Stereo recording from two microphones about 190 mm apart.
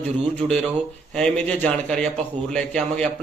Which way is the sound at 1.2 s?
5° left (ahead or behind).